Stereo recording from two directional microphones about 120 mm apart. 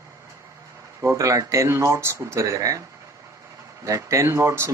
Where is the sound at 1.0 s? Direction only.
25° right (ahead or behind).